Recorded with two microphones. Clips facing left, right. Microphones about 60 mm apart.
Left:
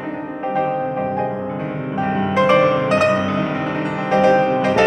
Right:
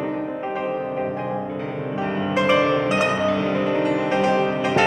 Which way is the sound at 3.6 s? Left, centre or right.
Centre.